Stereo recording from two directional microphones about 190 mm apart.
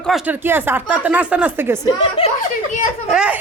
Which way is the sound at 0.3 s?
10° right (ahead or behind).